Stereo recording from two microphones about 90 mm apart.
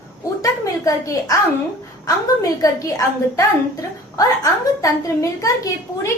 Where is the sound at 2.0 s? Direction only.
40° left (ahead or behind).